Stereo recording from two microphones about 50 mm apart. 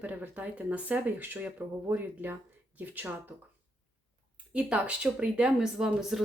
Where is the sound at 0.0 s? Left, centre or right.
Right.